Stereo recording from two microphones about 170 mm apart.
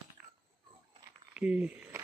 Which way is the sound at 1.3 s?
10° right (ahead or behind).